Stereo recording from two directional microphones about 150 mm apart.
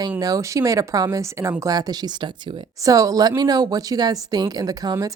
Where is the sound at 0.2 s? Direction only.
25° right (ahead or behind).